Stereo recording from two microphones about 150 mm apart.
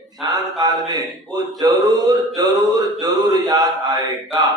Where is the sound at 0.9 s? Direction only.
25° right (ahead or behind).